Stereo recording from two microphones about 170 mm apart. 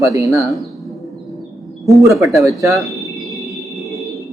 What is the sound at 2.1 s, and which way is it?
Speech, centre (ahead or behind).